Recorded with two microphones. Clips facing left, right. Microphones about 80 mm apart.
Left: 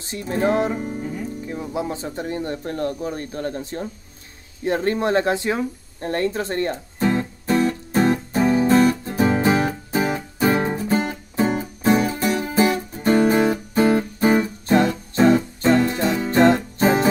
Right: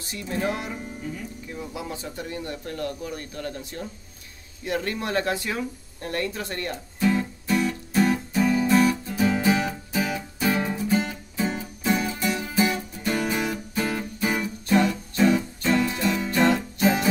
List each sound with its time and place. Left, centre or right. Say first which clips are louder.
0.0 s music: left 6 dB; left
4.6 s a sound: left 7 dB; left
9.0 s music: left 4 dB; left